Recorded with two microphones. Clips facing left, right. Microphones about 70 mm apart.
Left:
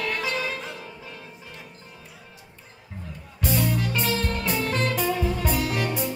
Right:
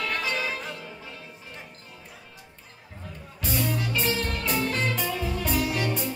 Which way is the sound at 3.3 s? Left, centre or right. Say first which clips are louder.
Left 3 dB; centre.